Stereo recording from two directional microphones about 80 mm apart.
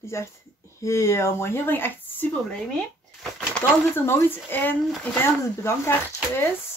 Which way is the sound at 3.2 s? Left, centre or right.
Centre.